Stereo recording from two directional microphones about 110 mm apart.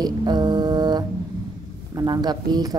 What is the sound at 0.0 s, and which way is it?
Music, 40° right (ahead or behind).